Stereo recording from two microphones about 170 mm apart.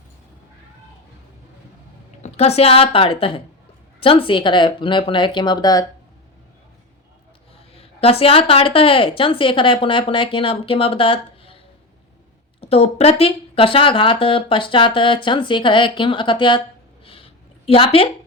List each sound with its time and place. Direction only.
2.2 s speech: 40° left (ahead or behind)
7.7 s speech: 35° left (ahead or behind)
17.1 s a sound: 35° left (ahead or behind)